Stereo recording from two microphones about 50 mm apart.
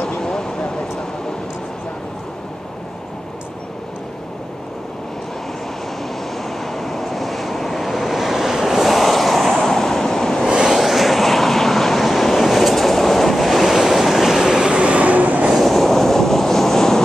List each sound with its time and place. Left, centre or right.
0.1 s a sound: centre
6.3 s vehicle: centre
10.7 s vehicle: centre
14.7 s vehicle: right
15.5 s train: centre